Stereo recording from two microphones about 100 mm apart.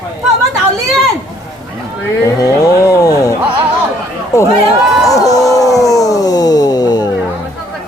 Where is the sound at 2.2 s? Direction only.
35° left (ahead or behind).